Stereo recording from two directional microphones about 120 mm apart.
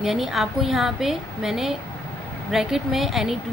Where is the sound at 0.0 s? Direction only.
5° right (ahead or behind).